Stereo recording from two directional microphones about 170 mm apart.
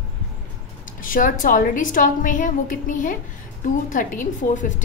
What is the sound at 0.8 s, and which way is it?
A woman's voice, 50° left (ahead or behind).